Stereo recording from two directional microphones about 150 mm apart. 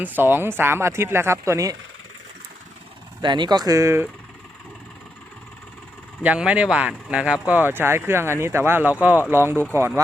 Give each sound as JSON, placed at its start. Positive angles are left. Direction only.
{"t": 0.0, "sound": "speech", "side_deg": -15}
{"t": 3.2, "sound": "speech", "side_deg": -30}
{"t": 6.2, "sound": "speech", "side_deg": -10}